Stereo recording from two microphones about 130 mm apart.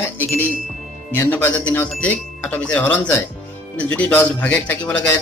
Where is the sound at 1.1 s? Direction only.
15° left (ahead or behind).